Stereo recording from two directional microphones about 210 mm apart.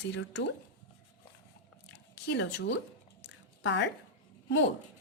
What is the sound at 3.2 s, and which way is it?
Squish, 60° left (ahead or behind).